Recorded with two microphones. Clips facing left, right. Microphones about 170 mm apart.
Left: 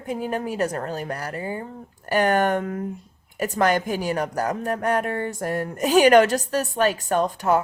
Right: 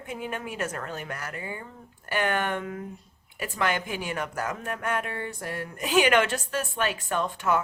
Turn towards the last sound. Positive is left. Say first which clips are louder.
# left 5 dB
turn(degrees=35)  # may be behind; listen again after turning